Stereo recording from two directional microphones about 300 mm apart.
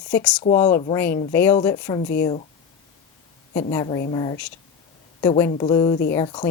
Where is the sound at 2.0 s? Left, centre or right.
Left.